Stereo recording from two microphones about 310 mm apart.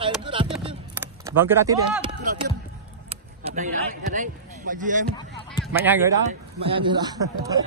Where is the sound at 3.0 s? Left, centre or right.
Right.